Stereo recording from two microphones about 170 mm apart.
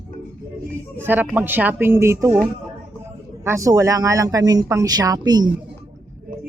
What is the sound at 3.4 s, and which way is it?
Speech, 15° right (ahead or behind).